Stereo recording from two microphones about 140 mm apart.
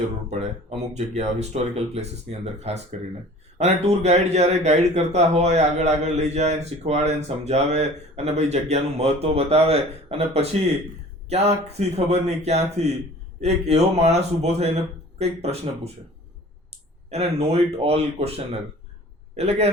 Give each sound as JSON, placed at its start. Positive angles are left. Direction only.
{"t": 0.3, "sound": "speech", "side_deg": -50}
{"t": 11.9, "sound": "speech", "side_deg": -50}
{"t": 17.1, "sound": "speech", "side_deg": -45}